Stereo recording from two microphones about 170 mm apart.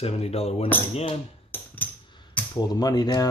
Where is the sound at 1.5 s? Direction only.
15° left (ahead or behind).